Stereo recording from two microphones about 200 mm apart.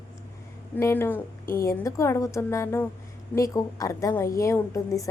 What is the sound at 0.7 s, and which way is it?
A woman's voice, 15° left (ahead or behind).